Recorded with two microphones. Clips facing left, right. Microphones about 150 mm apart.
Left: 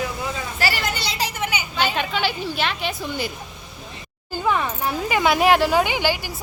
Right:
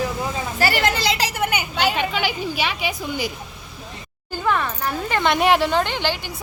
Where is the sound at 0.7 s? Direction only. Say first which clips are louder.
Right 6 dB; 90° right.